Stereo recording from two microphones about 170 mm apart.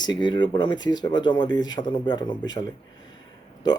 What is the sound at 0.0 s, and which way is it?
Speech, 25° left (ahead or behind).